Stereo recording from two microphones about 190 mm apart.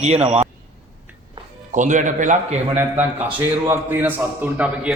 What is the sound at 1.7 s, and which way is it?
Speech, 40° right (ahead or behind).